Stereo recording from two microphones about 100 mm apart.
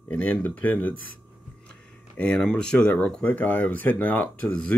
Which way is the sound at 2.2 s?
10° left (ahead or behind).